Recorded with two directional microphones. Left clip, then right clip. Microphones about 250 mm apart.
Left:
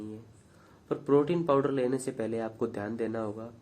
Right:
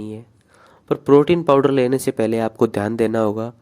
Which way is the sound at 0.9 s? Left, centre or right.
Right.